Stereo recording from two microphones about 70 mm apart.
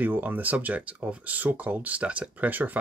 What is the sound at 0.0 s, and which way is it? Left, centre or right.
Speech, right.